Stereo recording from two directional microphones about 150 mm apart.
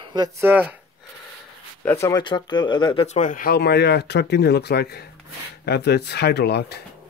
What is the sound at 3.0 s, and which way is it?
Speech, 55° left (ahead or behind).